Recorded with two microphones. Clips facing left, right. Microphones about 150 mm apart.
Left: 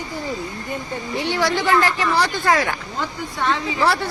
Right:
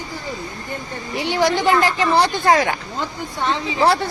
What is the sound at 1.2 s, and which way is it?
Speech, 15° right (ahead or behind).